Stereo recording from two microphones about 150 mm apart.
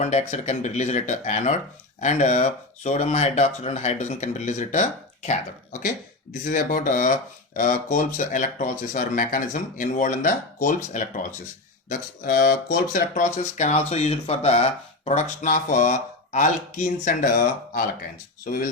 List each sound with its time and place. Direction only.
0.0 s speech: 50° left (ahead or behind)